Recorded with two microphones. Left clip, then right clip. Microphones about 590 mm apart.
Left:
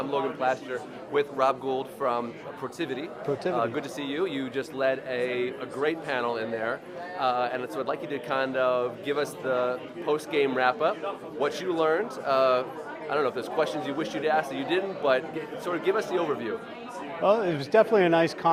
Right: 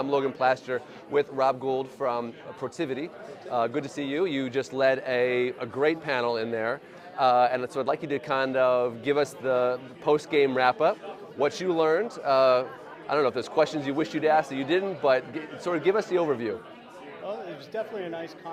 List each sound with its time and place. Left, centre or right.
0.1 s a man's voice: right
17.2 s speech: left